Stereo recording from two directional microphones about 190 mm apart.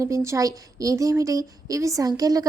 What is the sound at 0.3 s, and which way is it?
A woman's voice, 15° right (ahead or behind).